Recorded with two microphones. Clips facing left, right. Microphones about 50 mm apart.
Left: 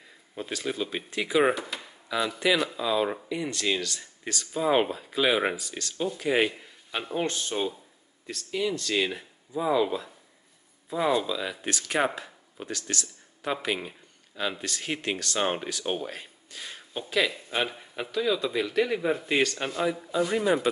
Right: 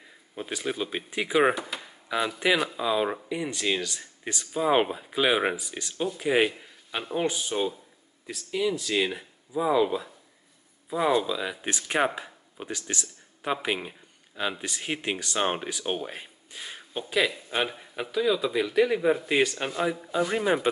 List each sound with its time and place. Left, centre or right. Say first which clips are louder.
0.4 s speech: even; centre
2.0 s a man's voice: even; centre
13.7 s a sound: even; centre
14.6 s a man's voice: even; centre